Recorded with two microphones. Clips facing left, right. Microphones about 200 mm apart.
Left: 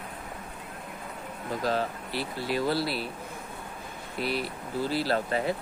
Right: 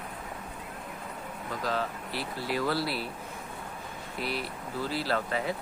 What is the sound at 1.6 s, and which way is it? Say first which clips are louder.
Speech: left 3 dB; 35° left (ahead or behind).